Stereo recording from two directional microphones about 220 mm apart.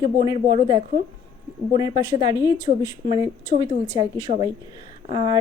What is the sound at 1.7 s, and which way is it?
A woman's voice, 15° right (ahead or behind).